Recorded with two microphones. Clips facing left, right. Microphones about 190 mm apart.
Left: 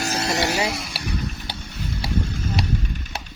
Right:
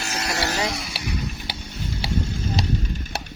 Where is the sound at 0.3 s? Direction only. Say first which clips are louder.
Left 2 dB; 20° left (ahead or behind).